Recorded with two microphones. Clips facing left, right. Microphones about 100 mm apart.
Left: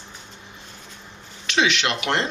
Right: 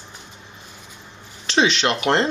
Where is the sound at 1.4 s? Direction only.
30° right (ahead or behind).